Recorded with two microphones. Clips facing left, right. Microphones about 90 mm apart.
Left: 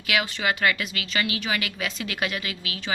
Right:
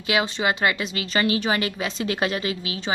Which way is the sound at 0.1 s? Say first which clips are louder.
Right 3 dB; 25° right (ahead or behind).